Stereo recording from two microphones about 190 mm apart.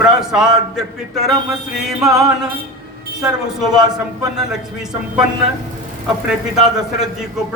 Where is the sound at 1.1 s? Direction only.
Centre (ahead or behind).